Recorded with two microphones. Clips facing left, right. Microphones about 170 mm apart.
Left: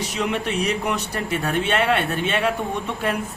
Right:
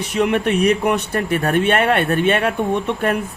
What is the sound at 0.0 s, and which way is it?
A man's voice, 55° right (ahead or behind).